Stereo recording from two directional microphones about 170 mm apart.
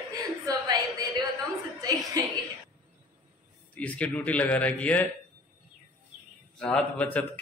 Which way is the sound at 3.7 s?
10° left (ahead or behind).